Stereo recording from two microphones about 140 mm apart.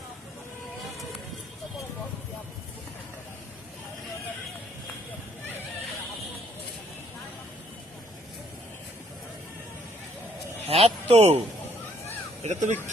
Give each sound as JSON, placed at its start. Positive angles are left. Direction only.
{"t": 10.7, "sound": "speech", "side_deg": -45}
{"t": 12.4, "sound": "speech", "side_deg": -60}